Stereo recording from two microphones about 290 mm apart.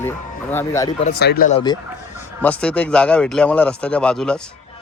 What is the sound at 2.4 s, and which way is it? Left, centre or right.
Speech, centre.